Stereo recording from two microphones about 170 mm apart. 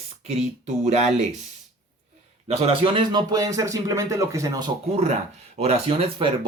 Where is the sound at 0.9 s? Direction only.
40° right (ahead or behind).